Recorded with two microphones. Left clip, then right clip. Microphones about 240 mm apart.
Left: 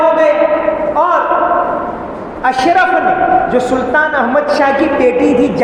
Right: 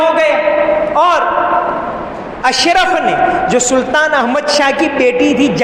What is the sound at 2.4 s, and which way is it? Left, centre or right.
A man's voice, right.